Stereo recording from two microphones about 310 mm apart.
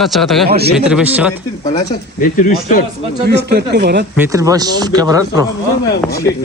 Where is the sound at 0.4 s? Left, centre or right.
Right.